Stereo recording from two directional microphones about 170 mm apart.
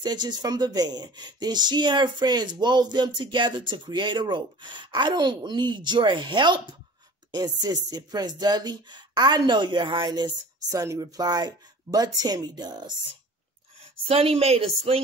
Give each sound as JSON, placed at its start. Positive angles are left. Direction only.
{"t": 0.0, "sound": "speech", "side_deg": -25}
{"t": 14.0, "sound": "a woman's voice", "side_deg": -35}